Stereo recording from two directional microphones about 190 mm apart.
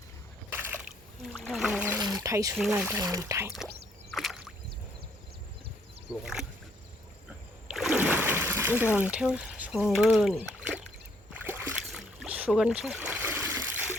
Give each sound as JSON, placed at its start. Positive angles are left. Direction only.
{"t": 0.5, "sound": "a sound", "side_deg": -10}
{"t": 1.2, "sound": "boat", "side_deg": 0}
{"t": 2.2, "sound": "speech", "side_deg": -15}
{"t": 2.6, "sound": "speech", "side_deg": -5}
{"t": 3.0, "sound": "speech", "side_deg": -20}
{"t": 4.1, "sound": "a sound", "side_deg": 0}
{"t": 6.1, "sound": "speech", "side_deg": -5}
{"t": 7.7, "sound": "splash", "side_deg": -5}
{"t": 11.4, "sound": "boat", "side_deg": -10}